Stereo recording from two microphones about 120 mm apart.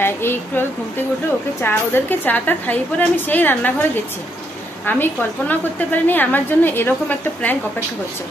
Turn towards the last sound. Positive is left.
turn(degrees=15)  # may be behind; listen again after turning